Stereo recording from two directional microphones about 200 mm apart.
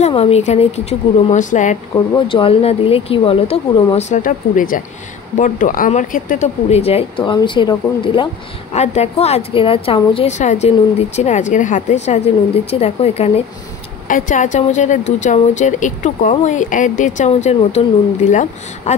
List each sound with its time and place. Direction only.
0.0 s a woman's voice: 30° left (ahead or behind)
2.0 s a woman's voice: 25° left (ahead or behind)